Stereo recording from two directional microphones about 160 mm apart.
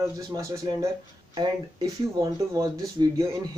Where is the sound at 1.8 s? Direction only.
20° right (ahead or behind).